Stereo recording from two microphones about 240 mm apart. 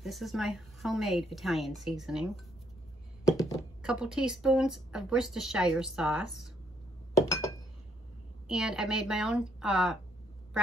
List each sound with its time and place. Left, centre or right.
0.0 s a woman's voice: centre
3.3 s a sound: centre
3.8 s a woman's voice: centre
8.5 s a woman's voice: centre